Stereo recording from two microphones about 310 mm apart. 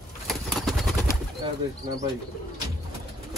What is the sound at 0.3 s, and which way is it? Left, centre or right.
Bird, centre.